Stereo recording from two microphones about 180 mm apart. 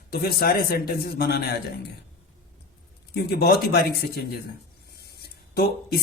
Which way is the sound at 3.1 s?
60° left (ahead or behind).